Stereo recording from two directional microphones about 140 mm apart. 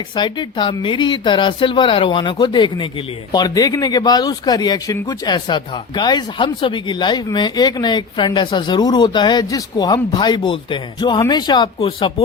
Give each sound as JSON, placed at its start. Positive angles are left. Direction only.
{"t": 0.2, "sound": "speech", "side_deg": 35}